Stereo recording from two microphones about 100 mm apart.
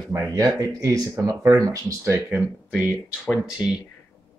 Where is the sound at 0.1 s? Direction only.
30° right (ahead or behind).